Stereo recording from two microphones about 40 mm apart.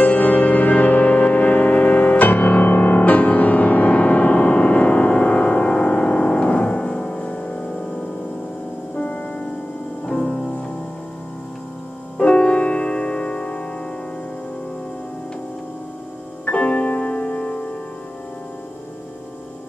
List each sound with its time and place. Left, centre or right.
0.0 s music: left
8.9 s music: left
10.0 s music: centre
12.2 s music: left
16.4 s music: left